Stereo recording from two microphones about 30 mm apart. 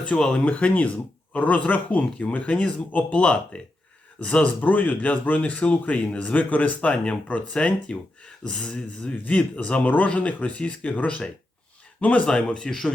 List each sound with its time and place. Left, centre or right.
0.1 s speech: left
0.4 s speech: left
3.5 s speech: left
4.6 s speech: left
4.9 s speech: left
6.9 s speech: left
9.2 s speech: left
9.8 s speech: left
10.1 s speech: left
10.6 s speech: left
11.9 s speech: left
12.2 s speech: left